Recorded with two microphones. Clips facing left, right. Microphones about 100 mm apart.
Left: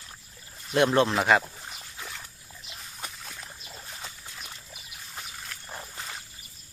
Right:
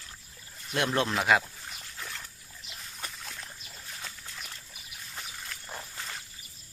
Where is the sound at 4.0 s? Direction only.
15° left (ahead or behind).